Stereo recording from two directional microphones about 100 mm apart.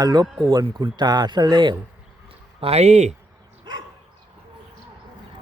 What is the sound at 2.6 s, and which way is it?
Speech, 85° right.